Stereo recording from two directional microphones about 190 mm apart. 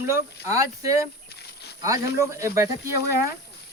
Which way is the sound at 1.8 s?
15° right (ahead or behind).